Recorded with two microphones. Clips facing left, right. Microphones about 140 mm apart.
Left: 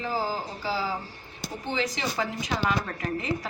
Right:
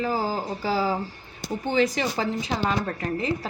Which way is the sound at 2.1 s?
30° right (ahead or behind).